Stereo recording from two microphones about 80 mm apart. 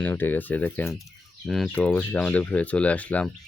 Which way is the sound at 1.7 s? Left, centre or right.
Left.